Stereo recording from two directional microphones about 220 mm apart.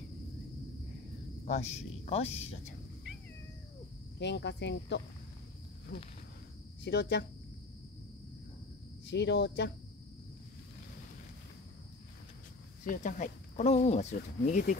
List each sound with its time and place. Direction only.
1.4 s speech: 30° left (ahead or behind)
4.2 s speech: 50° left (ahead or behind)
6.8 s speech: 50° left (ahead or behind)
9.0 s speech: 50° left (ahead or behind)
12.8 s speech: 35° left (ahead or behind)